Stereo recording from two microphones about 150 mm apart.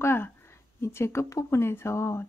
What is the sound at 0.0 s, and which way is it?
Speech, 15° left (ahead or behind).